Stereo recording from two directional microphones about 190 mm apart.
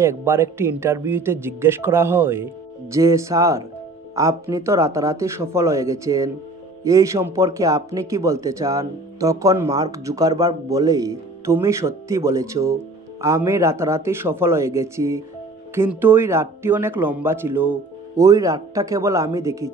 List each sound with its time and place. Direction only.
0.0 s speech: 15° right (ahead or behind)